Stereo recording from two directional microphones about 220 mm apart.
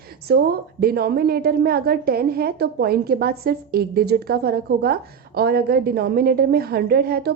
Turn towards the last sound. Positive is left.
turn(degrees=-45)  # may be behind; listen again after turning